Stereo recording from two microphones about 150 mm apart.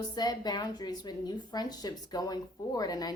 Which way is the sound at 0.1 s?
25° left (ahead or behind).